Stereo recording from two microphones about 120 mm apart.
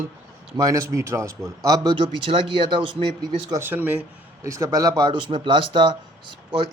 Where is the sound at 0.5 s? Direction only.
30° right (ahead or behind).